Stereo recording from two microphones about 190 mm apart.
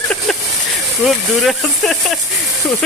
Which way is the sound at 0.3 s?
Centre (ahead or behind).